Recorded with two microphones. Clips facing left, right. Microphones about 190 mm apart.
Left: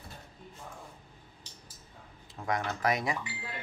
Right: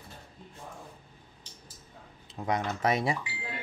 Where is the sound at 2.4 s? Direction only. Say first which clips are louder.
Right 2 dB; 20° right (ahead or behind).